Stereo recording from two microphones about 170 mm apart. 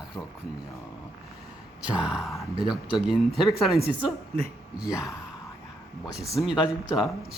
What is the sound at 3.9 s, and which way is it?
Mantra, 10° right (ahead or behind).